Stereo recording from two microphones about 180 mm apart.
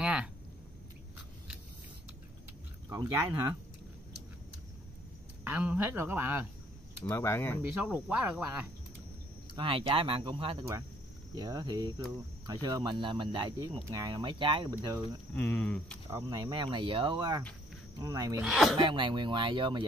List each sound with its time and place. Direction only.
0.0 s a sound: 5° right (ahead or behind)
2.9 s speech: 20° right (ahead or behind)
5.4 s speech: 10° right (ahead or behind)
7.1 s speech: 15° left (ahead or behind)
7.6 s speech: 10° right (ahead or behind)
9.6 s speech: 30° right (ahead or behind)
15.3 s speech: 10° left (ahead or behind)
16.1 s speech: 20° right (ahead or behind)
18.4 s speech: centre (ahead or behind)
18.8 s speech: 25° right (ahead or behind)